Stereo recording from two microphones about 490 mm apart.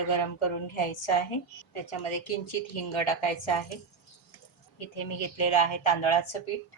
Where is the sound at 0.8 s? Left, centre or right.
Left.